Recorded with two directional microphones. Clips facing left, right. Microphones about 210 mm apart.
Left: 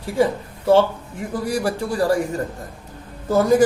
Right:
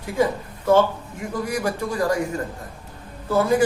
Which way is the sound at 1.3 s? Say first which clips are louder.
Left 2 dB; 35° left (ahead or behind).